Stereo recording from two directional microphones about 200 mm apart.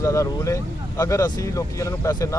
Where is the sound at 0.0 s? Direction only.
15° left (ahead or behind).